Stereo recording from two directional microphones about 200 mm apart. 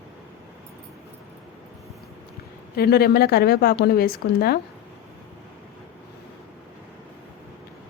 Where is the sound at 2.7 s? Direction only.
50° left (ahead or behind).